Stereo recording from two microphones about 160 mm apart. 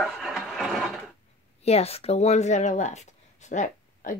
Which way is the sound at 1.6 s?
40° left (ahead or behind).